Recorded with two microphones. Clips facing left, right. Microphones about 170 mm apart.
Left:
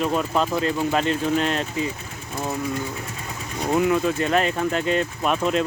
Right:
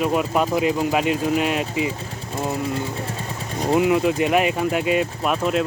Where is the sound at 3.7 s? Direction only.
15° right (ahead or behind).